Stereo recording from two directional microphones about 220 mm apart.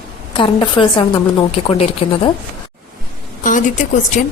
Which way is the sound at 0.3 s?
20° left (ahead or behind).